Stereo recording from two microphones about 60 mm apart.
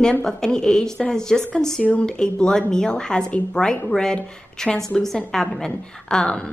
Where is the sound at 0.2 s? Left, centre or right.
Centre.